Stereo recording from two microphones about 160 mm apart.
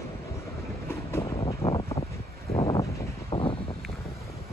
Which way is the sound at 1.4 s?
35° left (ahead or behind).